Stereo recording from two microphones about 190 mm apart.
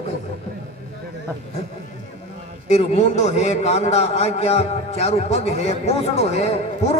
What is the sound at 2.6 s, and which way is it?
A man's voice, 35° left (ahead or behind).